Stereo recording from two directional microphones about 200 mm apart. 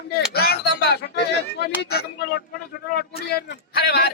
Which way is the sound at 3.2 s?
50° left (ahead or behind).